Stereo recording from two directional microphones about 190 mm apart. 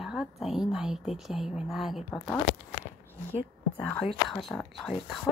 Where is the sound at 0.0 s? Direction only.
Centre (ahead or behind).